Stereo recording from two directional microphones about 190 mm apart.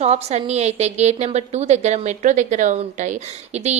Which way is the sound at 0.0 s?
35° right (ahead or behind).